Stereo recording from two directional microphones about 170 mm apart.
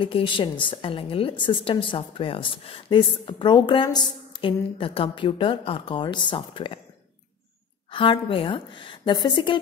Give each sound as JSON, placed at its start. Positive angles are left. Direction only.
{"t": 0.0, "sound": "a woman's voice", "side_deg": 30}
{"t": 7.9, "sound": "a woman's voice", "side_deg": 30}